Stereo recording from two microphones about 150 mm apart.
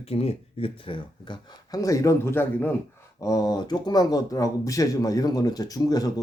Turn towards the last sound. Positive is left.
turn(degrees=25)  # may be behind; listen again after turning